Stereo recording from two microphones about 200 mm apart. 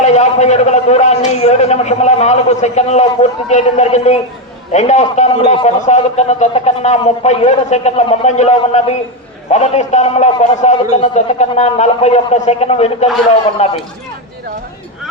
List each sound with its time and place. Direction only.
0.0 s a man's voice: 35° left (ahead or behind)